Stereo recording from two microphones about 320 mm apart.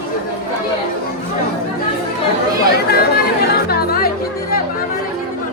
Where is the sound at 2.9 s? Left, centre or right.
Left.